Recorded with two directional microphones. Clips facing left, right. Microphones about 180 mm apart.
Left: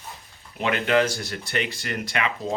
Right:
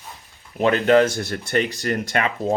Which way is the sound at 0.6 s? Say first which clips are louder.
Right 6 dB; 40° right (ahead or behind).